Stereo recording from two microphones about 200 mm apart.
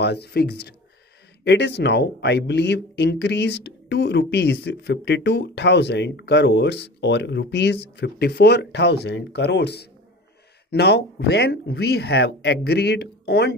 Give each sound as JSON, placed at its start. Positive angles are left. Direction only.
{"t": 0.0, "sound": "speech", "side_deg": 55}